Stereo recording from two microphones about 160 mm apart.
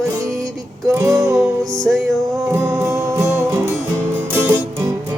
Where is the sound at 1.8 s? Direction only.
Centre (ahead or behind).